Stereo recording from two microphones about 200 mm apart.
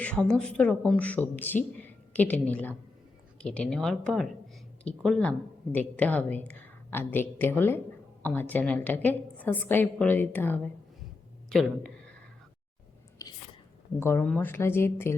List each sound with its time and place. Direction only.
0.0 s a woman's voice: 5° left (ahead or behind)
13.2 s biting: 15° left (ahead or behind)
14.0 s a woman's voice: 10° left (ahead or behind)